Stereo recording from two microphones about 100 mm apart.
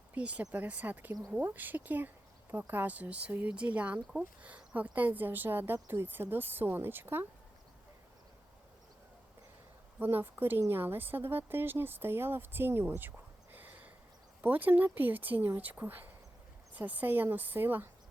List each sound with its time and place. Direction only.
0.1 s speech: 15° right (ahead or behind)
10.0 s speech: 20° right (ahead or behind)